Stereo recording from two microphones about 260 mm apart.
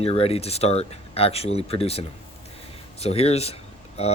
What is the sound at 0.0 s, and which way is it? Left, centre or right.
Speech, left.